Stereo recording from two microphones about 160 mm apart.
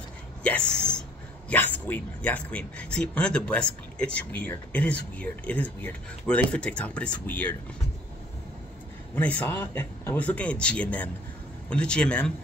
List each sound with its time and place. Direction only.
0.4 s speech: 5° left (ahead or behind)
9.1 s speech: 10° left (ahead or behind)